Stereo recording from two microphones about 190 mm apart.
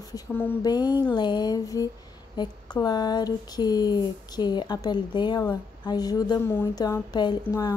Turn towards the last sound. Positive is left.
turn(degrees=15)  # may be behind; listen again after turning